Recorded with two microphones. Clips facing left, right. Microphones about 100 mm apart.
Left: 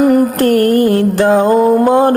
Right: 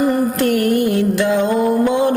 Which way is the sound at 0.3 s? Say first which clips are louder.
Left 5 dB; 45° left (ahead or behind).